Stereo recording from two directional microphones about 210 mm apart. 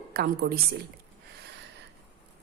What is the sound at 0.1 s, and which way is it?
Speech, 45° right (ahead or behind).